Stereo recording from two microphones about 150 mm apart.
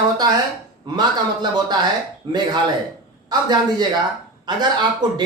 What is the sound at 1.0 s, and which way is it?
Speech, 30° right (ahead or behind).